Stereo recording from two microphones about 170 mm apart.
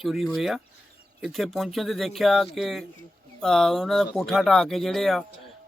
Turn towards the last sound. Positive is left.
turn(degrees=0)  # may be behind; listen again after turning